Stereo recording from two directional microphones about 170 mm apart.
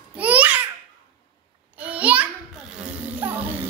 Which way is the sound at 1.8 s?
10° right (ahead or behind).